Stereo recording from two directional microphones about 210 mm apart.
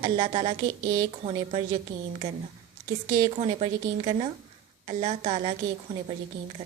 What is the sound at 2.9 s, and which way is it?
A woman's voice, 20° right (ahead or behind).